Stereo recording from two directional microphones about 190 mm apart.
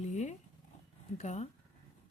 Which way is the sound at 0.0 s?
35° left (ahead or behind).